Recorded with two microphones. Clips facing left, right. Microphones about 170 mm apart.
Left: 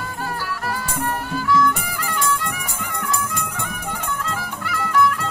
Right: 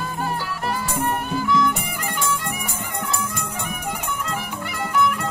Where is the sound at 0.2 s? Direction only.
20° right (ahead or behind).